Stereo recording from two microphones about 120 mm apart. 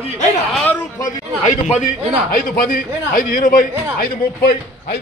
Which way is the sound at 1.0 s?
90° left.